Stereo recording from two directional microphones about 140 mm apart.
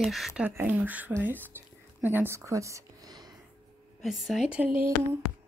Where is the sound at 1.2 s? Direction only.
15° right (ahead or behind).